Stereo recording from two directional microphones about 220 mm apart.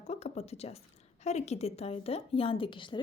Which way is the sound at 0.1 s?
30° left (ahead or behind).